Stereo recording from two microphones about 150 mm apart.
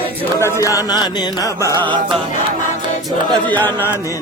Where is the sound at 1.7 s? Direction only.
30° right (ahead or behind).